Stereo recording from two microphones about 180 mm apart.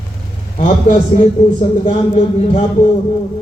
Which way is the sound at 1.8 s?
35° left (ahead or behind).